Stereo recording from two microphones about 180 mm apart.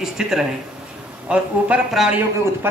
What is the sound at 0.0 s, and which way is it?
A man's voice, centre (ahead or behind).